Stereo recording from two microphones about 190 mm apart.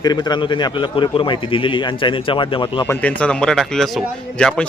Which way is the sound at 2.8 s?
10° left (ahead or behind).